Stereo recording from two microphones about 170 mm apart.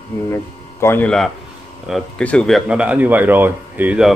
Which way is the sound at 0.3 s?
15° left (ahead or behind).